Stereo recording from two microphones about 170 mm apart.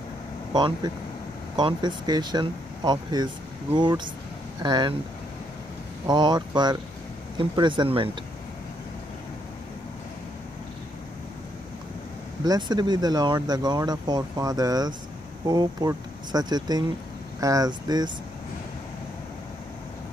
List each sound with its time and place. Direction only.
0.5 s speech: 25° right (ahead or behind)
6.0 s speech: 25° right (ahead or behind)
12.4 s speech: 25° right (ahead or behind)